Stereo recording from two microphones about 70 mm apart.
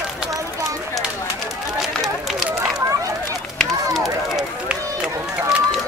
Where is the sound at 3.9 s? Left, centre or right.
Centre.